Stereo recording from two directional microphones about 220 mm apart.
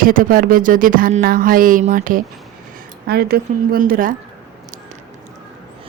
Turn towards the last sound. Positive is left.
turn(degrees=-40)  # may be behind; listen again after turning